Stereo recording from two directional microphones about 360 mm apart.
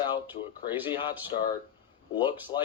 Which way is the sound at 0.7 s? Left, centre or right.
Centre.